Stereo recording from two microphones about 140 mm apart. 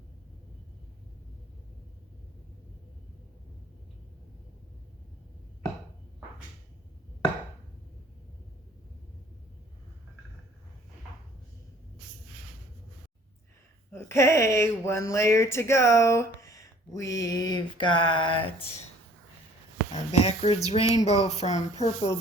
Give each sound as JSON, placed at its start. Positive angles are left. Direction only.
{"t": 13.9, "sound": "speech", "side_deg": 20}
{"t": 19.9, "sound": "a woman's voice", "side_deg": 50}